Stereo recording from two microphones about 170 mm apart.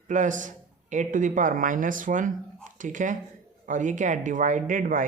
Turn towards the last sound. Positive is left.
turn(degrees=-50)  # may be behind; listen again after turning